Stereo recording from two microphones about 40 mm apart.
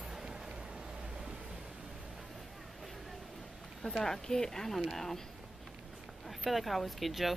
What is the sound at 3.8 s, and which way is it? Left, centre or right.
Speech, centre.